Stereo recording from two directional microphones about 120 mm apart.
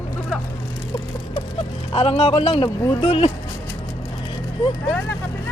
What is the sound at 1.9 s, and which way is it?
A man's voice, 50° left (ahead or behind).